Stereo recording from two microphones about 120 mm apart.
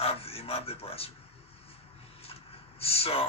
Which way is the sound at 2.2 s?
55° left (ahead or behind).